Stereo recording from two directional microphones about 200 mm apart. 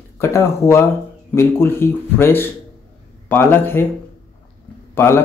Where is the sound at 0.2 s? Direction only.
15° left (ahead or behind).